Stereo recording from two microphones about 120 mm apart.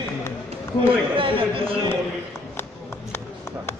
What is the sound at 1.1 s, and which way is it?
Speech, 50° right (ahead or behind).